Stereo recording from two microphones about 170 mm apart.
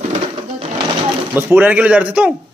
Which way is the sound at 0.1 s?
35° right (ahead or behind).